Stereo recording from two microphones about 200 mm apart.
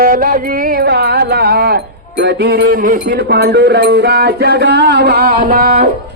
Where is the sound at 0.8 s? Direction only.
55° right (ahead or behind).